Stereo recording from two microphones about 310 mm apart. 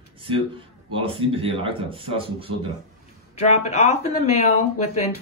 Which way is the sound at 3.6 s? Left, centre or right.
Left.